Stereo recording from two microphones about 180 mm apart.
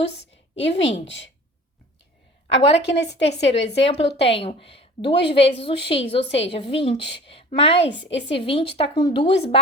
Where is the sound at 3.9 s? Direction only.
30° left (ahead or behind).